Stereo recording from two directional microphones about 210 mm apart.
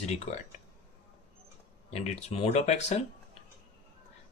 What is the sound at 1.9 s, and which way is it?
Speech, 30° left (ahead or behind).